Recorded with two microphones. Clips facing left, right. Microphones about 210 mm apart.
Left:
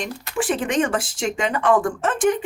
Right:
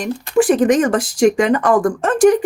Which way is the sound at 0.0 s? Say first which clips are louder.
Right 10 dB; 40° right (ahead or behind).